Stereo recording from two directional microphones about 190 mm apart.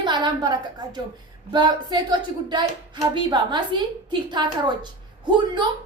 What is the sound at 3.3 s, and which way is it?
A woman's voice, 25° right (ahead or behind).